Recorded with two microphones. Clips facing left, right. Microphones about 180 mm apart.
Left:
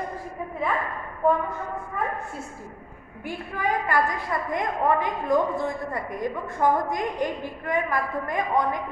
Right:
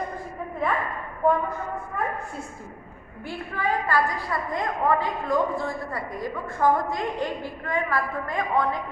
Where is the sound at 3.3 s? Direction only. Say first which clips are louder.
Even; 15° left (ahead or behind).